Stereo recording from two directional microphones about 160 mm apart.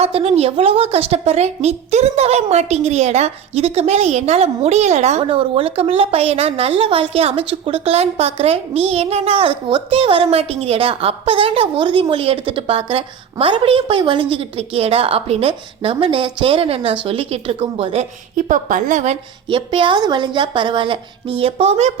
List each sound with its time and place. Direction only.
0.0 s a woman's voice: 35° right (ahead or behind)
18.3 s a woman's voice: 55° right (ahead or behind)
19.5 s a woman's voice: 30° right (ahead or behind)